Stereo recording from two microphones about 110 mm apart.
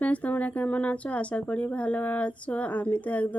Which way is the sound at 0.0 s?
15° left (ahead or behind).